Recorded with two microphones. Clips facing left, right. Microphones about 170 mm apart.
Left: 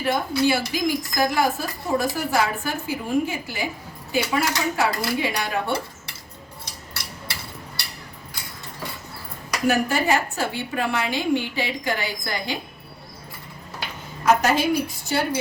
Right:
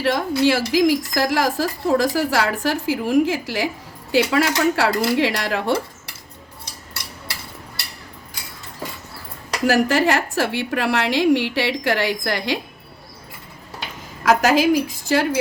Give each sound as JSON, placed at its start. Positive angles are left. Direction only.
{"t": 0.0, "sound": "a woman's voice", "side_deg": -80}
{"t": 4.1, "sound": "a woman's voice", "side_deg": -75}
{"t": 9.6, "sound": "a woman's voice", "side_deg": -90}
{"t": 14.3, "sound": "a woman's voice", "side_deg": -90}